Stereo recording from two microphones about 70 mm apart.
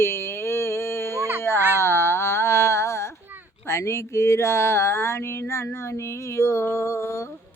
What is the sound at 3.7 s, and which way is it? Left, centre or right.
Speech, left.